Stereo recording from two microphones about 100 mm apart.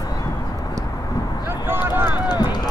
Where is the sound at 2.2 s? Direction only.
45° left (ahead or behind).